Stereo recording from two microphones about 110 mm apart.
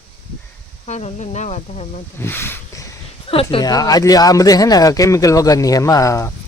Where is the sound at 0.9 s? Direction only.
90° left.